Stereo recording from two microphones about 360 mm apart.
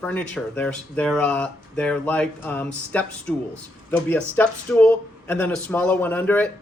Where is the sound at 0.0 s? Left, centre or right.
Centre.